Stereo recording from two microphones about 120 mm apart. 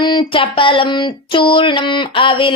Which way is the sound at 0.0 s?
40° left (ahead or behind).